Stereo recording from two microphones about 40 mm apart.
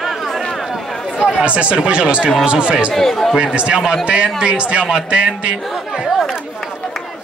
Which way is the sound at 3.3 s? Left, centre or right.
Right.